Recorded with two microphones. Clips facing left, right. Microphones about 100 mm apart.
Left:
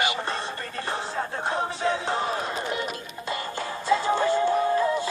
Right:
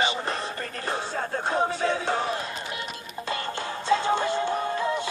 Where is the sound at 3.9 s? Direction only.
20° right (ahead or behind).